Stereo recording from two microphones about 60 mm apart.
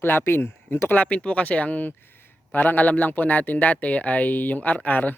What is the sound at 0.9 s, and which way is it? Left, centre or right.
Speech, left.